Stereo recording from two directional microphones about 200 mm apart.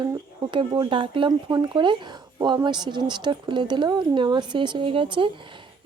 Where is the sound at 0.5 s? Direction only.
25° right (ahead or behind).